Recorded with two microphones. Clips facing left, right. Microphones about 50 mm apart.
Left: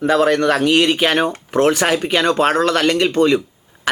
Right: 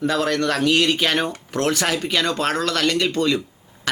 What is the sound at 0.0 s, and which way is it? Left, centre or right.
Speech, left.